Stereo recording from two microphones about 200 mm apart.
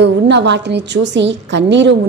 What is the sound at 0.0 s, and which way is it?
A woman's voice, 60° right (ahead or behind).